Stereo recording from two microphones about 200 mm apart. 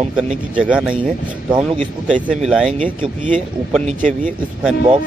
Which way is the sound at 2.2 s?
5° right (ahead or behind).